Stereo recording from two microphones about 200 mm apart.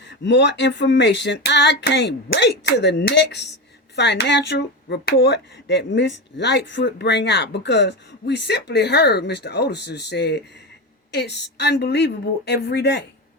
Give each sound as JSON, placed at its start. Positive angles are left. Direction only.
{"t": 0.1, "sound": "speech", "side_deg": 60}